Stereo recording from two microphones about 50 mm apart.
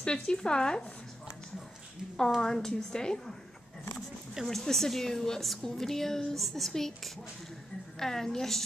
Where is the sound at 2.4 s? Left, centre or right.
Centre.